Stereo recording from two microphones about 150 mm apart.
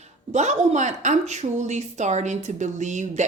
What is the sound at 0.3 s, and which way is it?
Speech, 55° right (ahead or behind).